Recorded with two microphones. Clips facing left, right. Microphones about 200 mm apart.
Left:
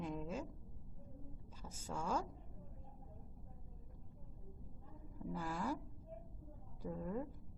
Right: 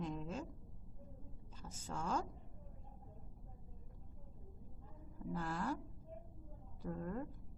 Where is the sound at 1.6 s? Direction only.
5° left (ahead or behind).